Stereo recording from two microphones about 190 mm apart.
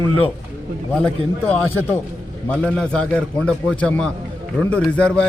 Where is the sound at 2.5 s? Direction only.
5° left (ahead or behind).